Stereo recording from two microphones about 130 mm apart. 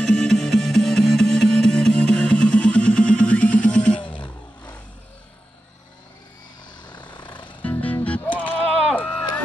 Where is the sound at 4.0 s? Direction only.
40° left (ahead or behind).